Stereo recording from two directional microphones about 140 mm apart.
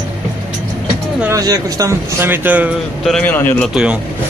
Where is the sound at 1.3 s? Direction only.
25° right (ahead or behind).